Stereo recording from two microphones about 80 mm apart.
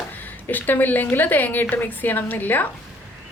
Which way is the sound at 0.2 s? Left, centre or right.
Left.